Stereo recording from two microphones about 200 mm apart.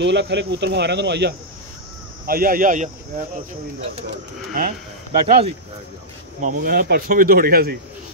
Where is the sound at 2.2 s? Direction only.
45° right (ahead or behind).